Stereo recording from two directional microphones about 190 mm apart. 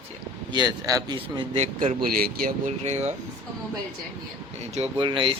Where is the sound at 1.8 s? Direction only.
45° right (ahead or behind).